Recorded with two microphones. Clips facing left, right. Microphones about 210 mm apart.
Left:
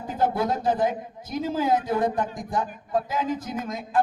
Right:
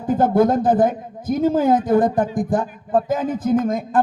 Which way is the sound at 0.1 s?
50° right (ahead or behind).